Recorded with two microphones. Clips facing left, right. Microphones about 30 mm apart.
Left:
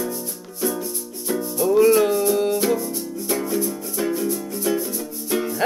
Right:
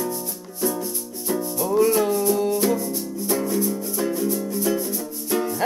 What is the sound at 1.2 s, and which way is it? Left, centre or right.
Music, centre.